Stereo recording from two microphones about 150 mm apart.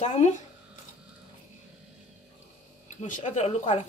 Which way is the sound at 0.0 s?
45° left (ahead or behind).